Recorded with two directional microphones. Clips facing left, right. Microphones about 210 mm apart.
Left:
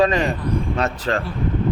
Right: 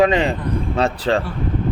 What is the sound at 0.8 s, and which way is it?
Speech, 30° right (ahead or behind).